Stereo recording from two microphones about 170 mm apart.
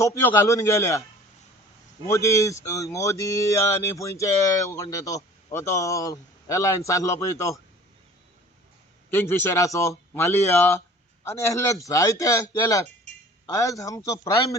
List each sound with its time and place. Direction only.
0.0 s speech: 15° left (ahead or behind)
2.0 s speech: 15° left (ahead or behind)
9.0 s speech: 15° left (ahead or behind)